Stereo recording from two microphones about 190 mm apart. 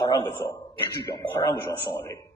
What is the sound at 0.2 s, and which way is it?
A man's voice, 25° left (ahead or behind).